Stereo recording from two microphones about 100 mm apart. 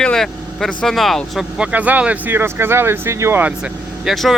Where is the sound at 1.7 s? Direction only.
15° right (ahead or behind).